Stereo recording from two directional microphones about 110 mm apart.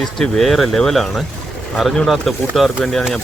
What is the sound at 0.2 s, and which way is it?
Speech, centre (ahead or behind).